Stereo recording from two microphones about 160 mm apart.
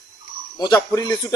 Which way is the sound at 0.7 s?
15° left (ahead or behind).